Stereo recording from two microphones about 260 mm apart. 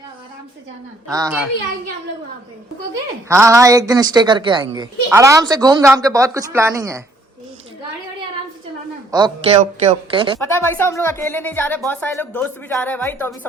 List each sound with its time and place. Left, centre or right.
1.1 s a woman's voice: centre
2.9 s a woman's voice: centre
9.1 s a woman's voice: centre
9.6 s speech: right
10.4 s a woman's voice: centre